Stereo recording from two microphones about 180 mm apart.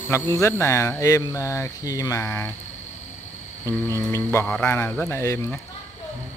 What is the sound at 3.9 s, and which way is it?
Speech, 15° left (ahead or behind).